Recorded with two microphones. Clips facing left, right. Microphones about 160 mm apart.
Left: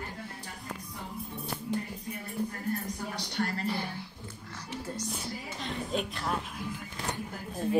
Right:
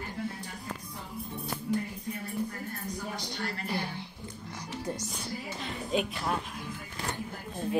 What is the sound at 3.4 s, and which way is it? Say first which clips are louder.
Speech: left 6 dB; 50° left (ahead or behind).